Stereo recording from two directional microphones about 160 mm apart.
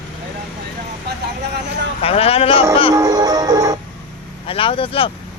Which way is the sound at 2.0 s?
35° left (ahead or behind).